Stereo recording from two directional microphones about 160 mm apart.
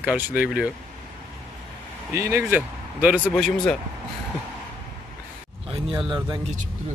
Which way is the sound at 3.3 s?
Centre (ahead or behind).